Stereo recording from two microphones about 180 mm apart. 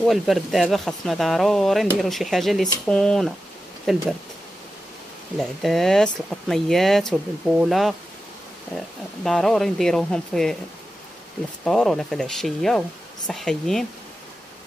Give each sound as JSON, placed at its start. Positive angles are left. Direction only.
{"t": 0.0, "sound": "speech", "side_deg": 0}
{"t": 5.4, "sound": "speech", "side_deg": 0}
{"t": 11.6, "sound": "speech", "side_deg": 5}